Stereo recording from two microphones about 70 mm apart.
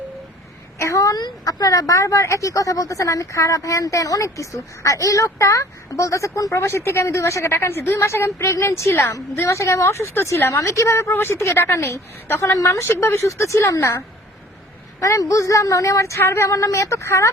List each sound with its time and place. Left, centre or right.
0.8 s a woman's voice: left
15.0 s a woman's voice: left